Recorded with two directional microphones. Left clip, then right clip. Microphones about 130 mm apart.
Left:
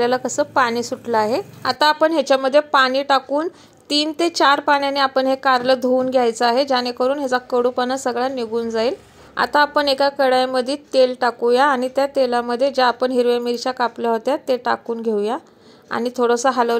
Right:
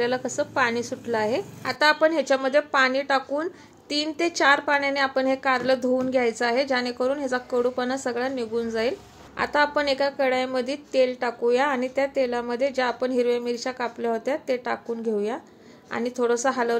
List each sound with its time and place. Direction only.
0.0 s a woman's voice: 30° left (ahead or behind)